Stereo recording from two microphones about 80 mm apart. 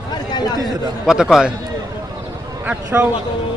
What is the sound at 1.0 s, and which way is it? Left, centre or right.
Speech, centre.